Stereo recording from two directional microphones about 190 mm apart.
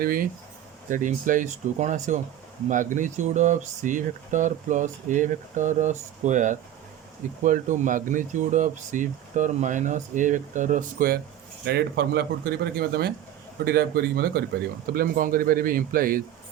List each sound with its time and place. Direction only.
0.0 s speech: 50° right (ahead or behind)
11.6 s speech: 60° right (ahead or behind)